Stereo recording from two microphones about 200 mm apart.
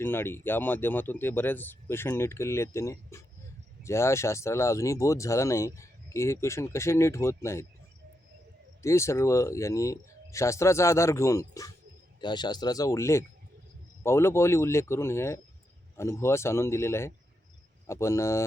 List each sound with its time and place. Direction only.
0.0 s speech: 10° left (ahead or behind)
8.8 s speech: 15° left (ahead or behind)